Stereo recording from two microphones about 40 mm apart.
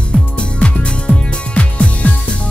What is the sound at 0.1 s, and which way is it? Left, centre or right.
Music, left.